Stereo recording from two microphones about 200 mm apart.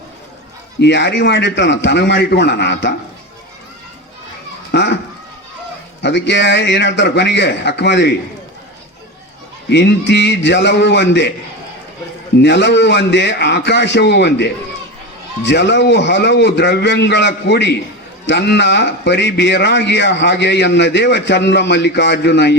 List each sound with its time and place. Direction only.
0.8 s speech: 60° left (ahead or behind)
4.7 s a child's voice: 60° left (ahead or behind)
6.0 s speech: 60° left (ahead or behind)
9.6 s speech: 60° left (ahead or behind)
12.4 s speech: 60° left (ahead or behind)